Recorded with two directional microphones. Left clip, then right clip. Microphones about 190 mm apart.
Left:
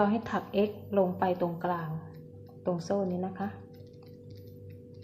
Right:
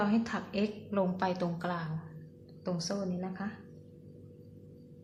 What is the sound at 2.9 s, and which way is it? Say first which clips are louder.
Speech: left 6 dB; 30° left (ahead or behind).